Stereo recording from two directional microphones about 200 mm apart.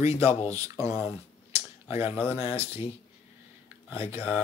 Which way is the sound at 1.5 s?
15° right (ahead or behind).